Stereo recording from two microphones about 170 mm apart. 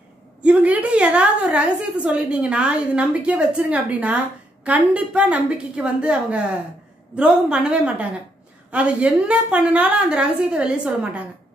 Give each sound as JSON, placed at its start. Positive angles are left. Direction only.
{"t": 0.4, "sound": "a woman's voice", "side_deg": -10}